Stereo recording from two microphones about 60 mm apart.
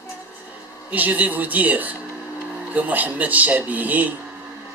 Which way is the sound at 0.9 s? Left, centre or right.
Right.